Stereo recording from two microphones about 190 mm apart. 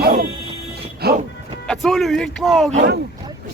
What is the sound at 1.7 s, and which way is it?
Speech, centre (ahead or behind).